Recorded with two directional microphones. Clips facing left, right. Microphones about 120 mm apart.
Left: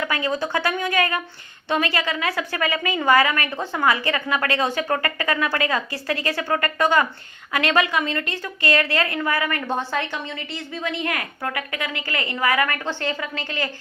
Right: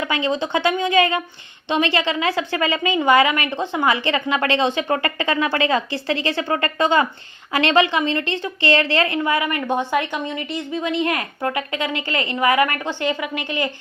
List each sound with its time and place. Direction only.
0.0 s a woman's voice: 25° right (ahead or behind)